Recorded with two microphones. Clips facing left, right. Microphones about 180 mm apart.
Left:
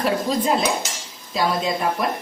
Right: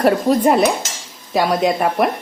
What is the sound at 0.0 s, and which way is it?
Speech, 60° right (ahead or behind).